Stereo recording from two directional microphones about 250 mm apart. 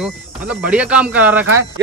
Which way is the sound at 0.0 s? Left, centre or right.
Centre.